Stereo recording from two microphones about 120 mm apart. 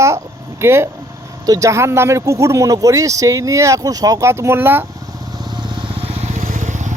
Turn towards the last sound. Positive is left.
turn(degrees=-90)